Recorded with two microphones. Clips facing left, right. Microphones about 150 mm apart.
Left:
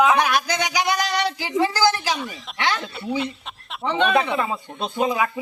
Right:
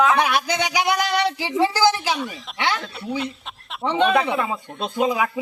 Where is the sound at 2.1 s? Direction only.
Centre (ahead or behind).